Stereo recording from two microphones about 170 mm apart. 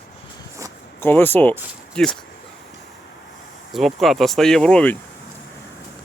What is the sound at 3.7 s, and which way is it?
Speech, centre (ahead or behind).